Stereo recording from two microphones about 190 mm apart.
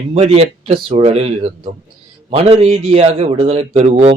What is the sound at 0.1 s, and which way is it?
A man's voice, 35° right (ahead or behind).